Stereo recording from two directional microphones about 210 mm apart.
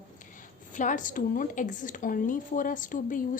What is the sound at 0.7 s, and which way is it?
Speech, 35° left (ahead or behind).